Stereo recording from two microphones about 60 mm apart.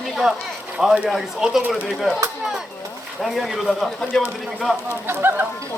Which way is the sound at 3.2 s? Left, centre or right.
Centre.